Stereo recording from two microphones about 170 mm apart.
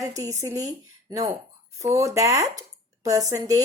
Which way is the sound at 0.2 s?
20° right (ahead or behind).